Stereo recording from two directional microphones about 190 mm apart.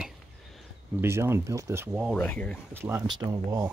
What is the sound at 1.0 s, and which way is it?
Speech, 15° right (ahead or behind).